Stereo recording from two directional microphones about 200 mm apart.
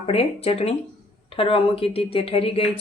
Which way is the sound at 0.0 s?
30° left (ahead or behind).